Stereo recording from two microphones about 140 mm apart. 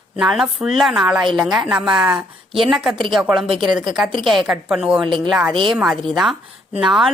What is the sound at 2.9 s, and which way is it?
Speech, 35° right (ahead or behind).